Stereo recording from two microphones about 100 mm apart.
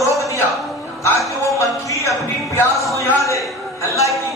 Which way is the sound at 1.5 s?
30° left (ahead or behind).